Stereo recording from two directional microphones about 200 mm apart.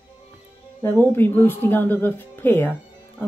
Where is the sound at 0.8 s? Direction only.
10° left (ahead or behind).